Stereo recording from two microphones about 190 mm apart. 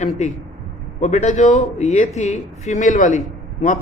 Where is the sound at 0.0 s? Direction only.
40° left (ahead or behind).